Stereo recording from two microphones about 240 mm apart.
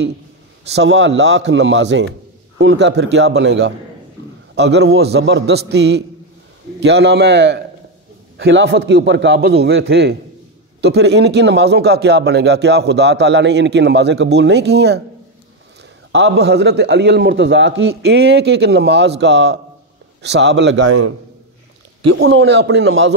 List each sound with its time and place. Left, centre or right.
0.7 s a man's voice: right
16.1 s a man's voice: right
20.8 s a man's voice: right
22.1 s a man's voice: right